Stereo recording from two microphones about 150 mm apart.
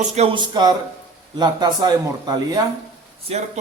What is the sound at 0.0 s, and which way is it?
Speech, 50° right (ahead or behind).